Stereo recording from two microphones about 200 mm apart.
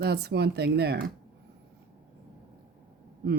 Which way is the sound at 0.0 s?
55° right (ahead or behind).